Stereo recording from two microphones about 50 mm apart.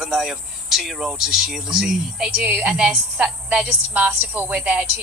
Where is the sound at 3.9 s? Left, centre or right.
Right.